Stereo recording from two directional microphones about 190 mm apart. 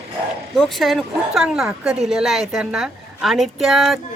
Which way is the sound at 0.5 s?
Centre (ahead or behind).